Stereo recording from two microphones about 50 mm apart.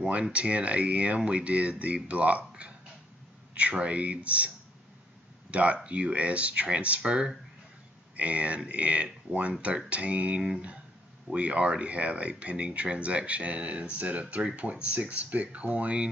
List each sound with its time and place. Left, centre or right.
0.0 s speech: right
5.5 s speech: right